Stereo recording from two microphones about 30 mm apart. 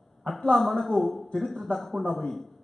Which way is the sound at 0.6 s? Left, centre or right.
Centre.